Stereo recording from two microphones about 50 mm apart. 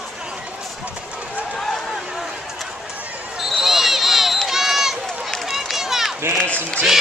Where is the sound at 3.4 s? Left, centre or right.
Centre.